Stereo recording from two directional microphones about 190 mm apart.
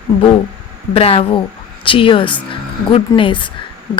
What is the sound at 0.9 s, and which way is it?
A woman's voice, 30° left (ahead or behind).